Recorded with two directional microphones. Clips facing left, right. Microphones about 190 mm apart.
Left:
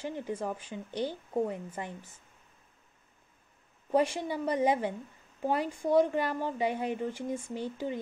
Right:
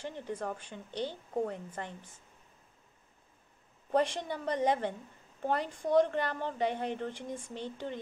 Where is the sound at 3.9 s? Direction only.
5° left (ahead or behind).